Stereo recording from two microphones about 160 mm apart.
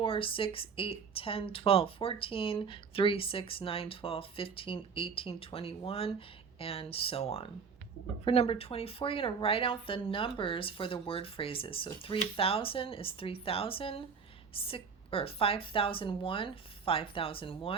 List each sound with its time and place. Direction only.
0.0 s speech: 35° left (ahead or behind)